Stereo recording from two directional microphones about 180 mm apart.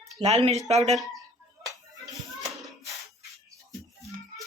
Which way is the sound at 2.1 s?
Centre (ahead or behind).